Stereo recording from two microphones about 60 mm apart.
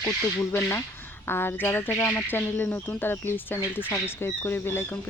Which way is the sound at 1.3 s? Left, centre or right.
Left.